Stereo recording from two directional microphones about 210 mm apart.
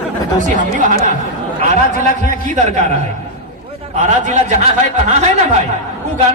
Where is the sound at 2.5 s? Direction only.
35° right (ahead or behind).